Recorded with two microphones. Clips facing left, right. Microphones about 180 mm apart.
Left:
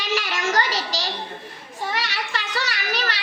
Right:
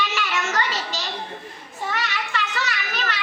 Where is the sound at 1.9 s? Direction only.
35° left (ahead or behind).